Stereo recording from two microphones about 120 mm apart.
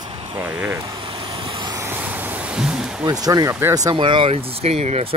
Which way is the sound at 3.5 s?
20° right (ahead or behind).